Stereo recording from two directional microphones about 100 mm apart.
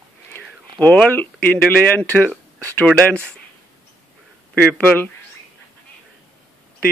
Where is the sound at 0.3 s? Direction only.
15° left (ahead or behind).